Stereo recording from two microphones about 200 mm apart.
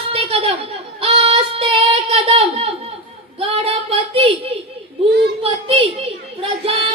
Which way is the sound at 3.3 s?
30° right (ahead or behind).